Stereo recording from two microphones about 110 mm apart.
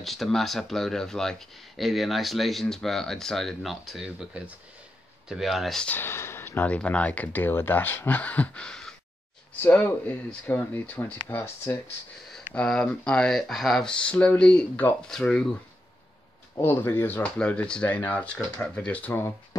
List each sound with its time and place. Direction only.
0.0 s speech: centre (ahead or behind)
5.9 s speech: 20° left (ahead or behind)
12.6 s speech: 5° left (ahead or behind)
16.5 s speech: 20° left (ahead or behind)